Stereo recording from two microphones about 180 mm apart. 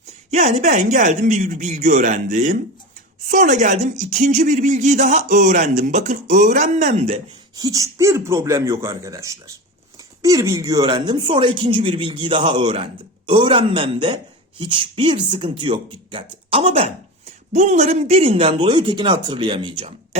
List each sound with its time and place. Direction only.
0.3 s speech: 40° right (ahead or behind)
7.5 s speech: 20° right (ahead or behind)